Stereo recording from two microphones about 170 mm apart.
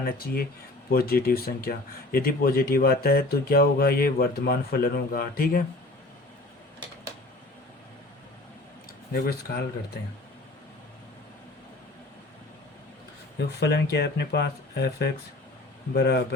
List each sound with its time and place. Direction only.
0.0 s speech: 60° left (ahead or behind)
9.1 s speech: 65° left (ahead or behind)
13.6 s speech: 75° left (ahead or behind)